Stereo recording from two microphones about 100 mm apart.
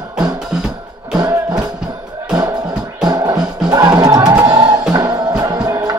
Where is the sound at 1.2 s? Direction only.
40° right (ahead or behind).